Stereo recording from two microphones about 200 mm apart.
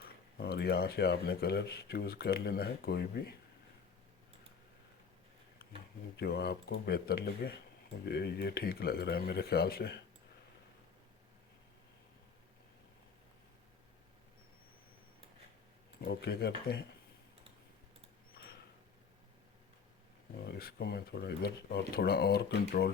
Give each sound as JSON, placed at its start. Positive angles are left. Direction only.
{"t": 0.3, "sound": "speech", "side_deg": 55}
{"t": 6.1, "sound": "speech", "side_deg": 55}
{"t": 16.0, "sound": "speech", "side_deg": 55}
{"t": 20.4, "sound": "speech", "side_deg": 50}